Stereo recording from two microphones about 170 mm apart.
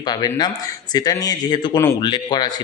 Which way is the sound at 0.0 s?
25° left (ahead or behind).